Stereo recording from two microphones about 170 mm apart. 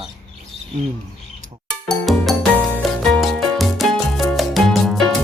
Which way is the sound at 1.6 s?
Centre (ahead or behind).